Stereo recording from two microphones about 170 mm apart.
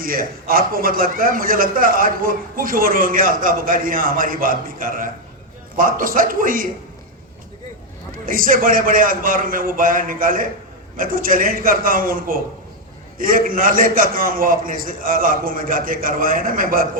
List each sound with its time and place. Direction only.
0.0 s a man's voice: 55° right (ahead or behind)
8.3 s a man's voice: 55° right (ahead or behind)